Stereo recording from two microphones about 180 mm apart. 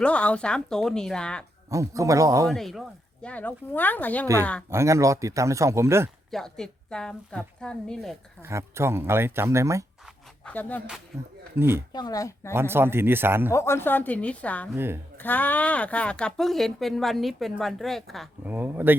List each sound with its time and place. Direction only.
0.0 s speech: 5° left (ahead or behind)
1.7 s speech: 15° right (ahead or behind)
2.5 s speech: centre (ahead or behind)
4.7 s speech: 15° right (ahead or behind)
6.3 s speech: 5° left (ahead or behind)
8.4 s speech: 15° right (ahead or behind)
10.4 s speech: 10° left (ahead or behind)
11.1 s speech: 15° right (ahead or behind)
11.9 s speech: 20° left (ahead or behind)
12.5 s speech: 15° right (ahead or behind)
13.5 s speech: 15° left (ahead or behind)
14.8 s speech: 10° right (ahead or behind)
15.2 s speech: 10° left (ahead or behind)
18.4 s speech: 10° right (ahead or behind)